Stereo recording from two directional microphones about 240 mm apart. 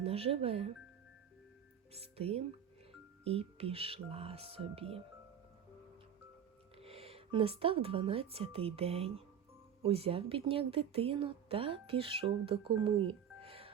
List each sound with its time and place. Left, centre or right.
0.0 s speech: right
1.9 s speech: right
6.7 s speech: right